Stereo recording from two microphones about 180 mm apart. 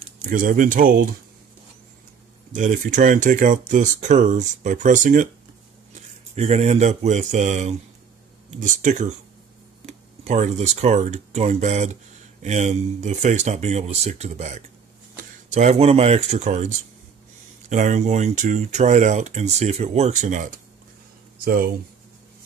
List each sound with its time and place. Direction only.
0.2 s speech: 50° right (ahead or behind)
2.5 s speech: 45° right (ahead or behind)
6.3 s speech: 35° right (ahead or behind)